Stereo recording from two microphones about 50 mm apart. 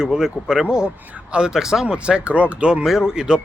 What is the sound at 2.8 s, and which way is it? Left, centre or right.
Speech, centre.